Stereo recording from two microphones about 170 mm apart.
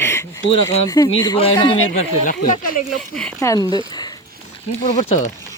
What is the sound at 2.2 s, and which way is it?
Speech, 55° left (ahead or behind).